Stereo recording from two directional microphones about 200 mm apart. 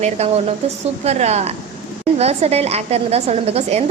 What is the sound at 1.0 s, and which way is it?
A woman's voice, 35° right (ahead or behind).